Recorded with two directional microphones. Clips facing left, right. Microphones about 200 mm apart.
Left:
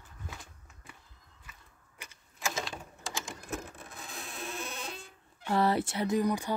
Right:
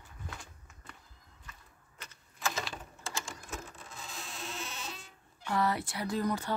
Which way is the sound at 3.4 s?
55° left (ahead or behind).